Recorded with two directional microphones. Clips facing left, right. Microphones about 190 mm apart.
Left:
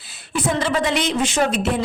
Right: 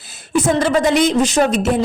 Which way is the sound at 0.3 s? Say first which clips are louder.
Right 6 dB; 45° right (ahead or behind).